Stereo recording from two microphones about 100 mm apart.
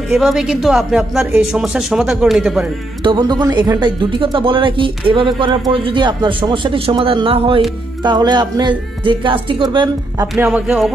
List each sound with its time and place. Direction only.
0.1 s a woman's voice: 5° right (ahead or behind)
3.0 s a woman's voice: 45° right (ahead or behind)
4.4 s speech: 55° right (ahead or behind)
8.0 s a woman's voice: 45° right (ahead or behind)
10.4 s speech: 15° right (ahead or behind)